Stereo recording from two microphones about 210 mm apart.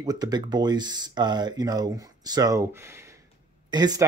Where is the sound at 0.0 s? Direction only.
20° right (ahead or behind).